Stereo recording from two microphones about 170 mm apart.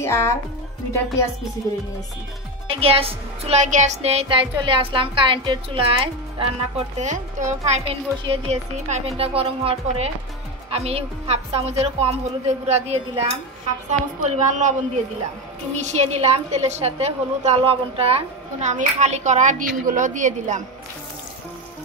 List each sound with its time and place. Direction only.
0.0 s speech: 15° left (ahead or behind)
2.8 s music: 35° right (ahead or behind)
13.8 s a woman's voice: 45° right (ahead or behind)
15.8 s a woman's voice: 40° right (ahead or behind)